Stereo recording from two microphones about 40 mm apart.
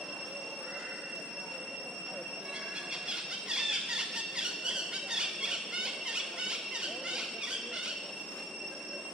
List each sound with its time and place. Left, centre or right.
3.1 s squeal: centre